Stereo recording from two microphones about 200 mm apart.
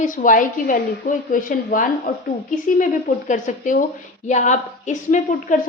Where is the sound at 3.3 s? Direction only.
40° left (ahead or behind).